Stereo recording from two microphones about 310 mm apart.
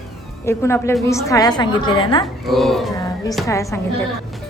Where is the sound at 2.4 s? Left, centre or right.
Centre.